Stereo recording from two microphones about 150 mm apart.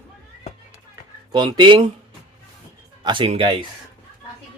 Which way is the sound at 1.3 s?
30° right (ahead or behind).